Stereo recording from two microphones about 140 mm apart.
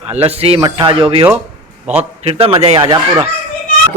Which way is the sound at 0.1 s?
45° right (ahead or behind).